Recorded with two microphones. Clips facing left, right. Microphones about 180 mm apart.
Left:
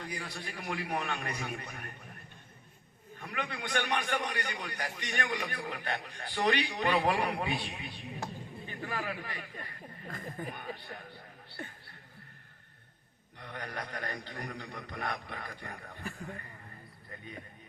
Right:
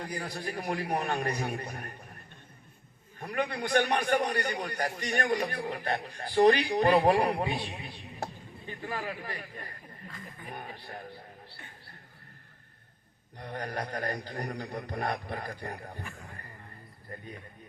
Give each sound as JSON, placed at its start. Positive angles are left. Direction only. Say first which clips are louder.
{"t": 0.0, "sound": "a man's voice", "louder": "right 5 dB", "side_deg": -40}
{"t": 3.2, "sound": "a man's voice", "louder": "right 7 dB", "side_deg": -40}
{"t": 10.1, "sound": "speech", "louder": "left 7 dB", "side_deg": 45}
{"t": 13.4, "sound": "a man's voice", "louder": "right 5 dB", "side_deg": -35}